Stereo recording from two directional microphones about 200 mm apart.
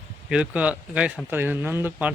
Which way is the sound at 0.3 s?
5° right (ahead or behind).